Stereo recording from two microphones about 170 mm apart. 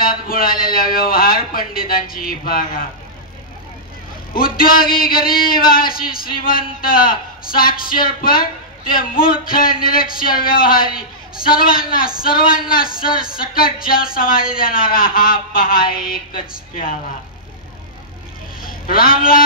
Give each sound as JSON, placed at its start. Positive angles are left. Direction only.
{"t": 0.0, "sound": "speech", "side_deg": 60}
{"t": 4.3, "sound": "speech", "side_deg": 60}
{"t": 18.9, "sound": "speech", "side_deg": 60}